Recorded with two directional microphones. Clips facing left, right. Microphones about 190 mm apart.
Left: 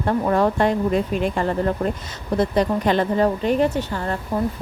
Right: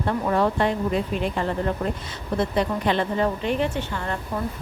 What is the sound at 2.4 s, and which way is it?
A woman's voice, 40° left (ahead or behind).